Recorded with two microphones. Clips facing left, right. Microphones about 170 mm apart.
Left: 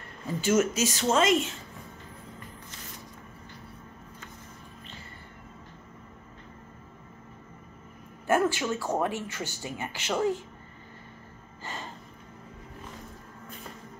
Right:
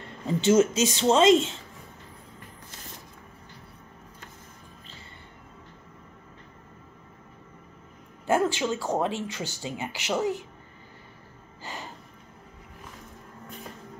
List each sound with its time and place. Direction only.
0.3 s speech: 25° right (ahead or behind)
8.3 s speech: 15° right (ahead or behind)
11.6 s a sound: 15° right (ahead or behind)